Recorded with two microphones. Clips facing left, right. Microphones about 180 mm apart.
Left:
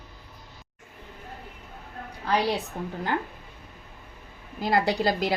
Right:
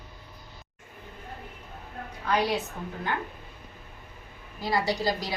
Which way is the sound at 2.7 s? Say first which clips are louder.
Left 4 dB; 35° left (ahead or behind).